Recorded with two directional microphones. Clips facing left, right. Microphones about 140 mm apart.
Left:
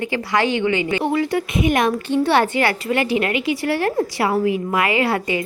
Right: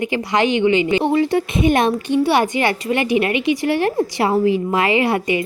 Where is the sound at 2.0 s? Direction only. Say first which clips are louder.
Right 1 dB; 15° right (ahead or behind).